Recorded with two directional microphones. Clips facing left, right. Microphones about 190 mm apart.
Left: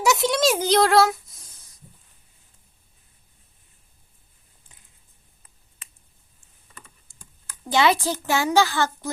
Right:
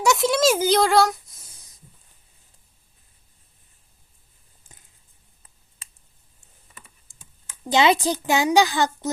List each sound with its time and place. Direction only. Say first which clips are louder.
0.0 s speech: right 1 dB; centre (ahead or behind)
7.6 s a child's voice: right 2 dB; 20° right (ahead or behind)